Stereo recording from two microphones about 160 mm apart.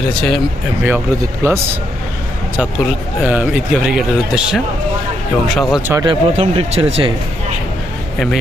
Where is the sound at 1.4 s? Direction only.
20° right (ahead or behind).